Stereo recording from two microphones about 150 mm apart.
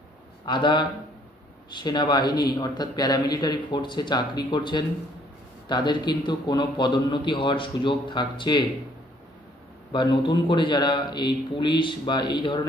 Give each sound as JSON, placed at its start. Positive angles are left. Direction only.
{"t": 0.5, "sound": "a man's voice", "side_deg": 30}
{"t": 9.9, "sound": "a man's voice", "side_deg": 30}